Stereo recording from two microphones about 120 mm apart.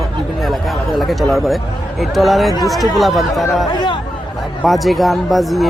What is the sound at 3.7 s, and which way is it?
Speech, 40° left (ahead or behind).